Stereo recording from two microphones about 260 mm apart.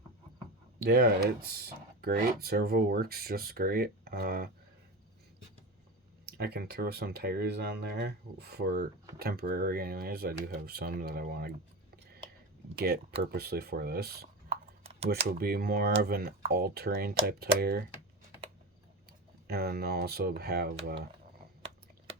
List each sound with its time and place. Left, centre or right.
0.8 s speech: right
6.2 s speech: right
12.7 s speech: right
19.5 s speech: right